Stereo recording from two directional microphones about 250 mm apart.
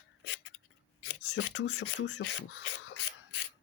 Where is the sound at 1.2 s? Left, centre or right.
Left.